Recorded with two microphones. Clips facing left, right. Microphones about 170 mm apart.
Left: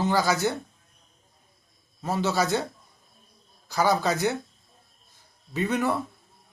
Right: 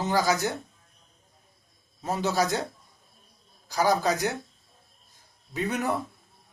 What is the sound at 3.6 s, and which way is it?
Speech, 15° right (ahead or behind).